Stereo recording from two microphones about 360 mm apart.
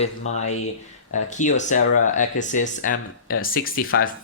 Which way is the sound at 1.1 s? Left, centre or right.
Centre.